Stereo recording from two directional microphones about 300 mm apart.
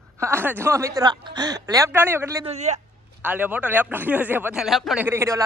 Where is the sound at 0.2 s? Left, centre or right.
Centre.